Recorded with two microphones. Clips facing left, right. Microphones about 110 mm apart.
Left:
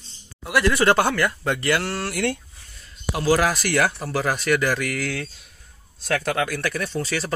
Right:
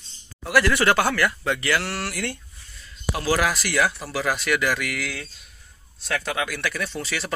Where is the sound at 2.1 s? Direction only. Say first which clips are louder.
Left 6 dB; 70° left (ahead or behind).